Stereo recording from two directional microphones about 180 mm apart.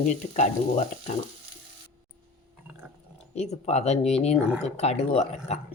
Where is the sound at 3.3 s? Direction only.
40° left (ahead or behind).